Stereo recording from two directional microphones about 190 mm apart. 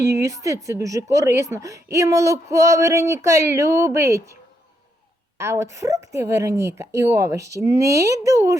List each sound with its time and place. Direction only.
0.0 s speech: 15° right (ahead or behind)
5.4 s speech: 15° right (ahead or behind)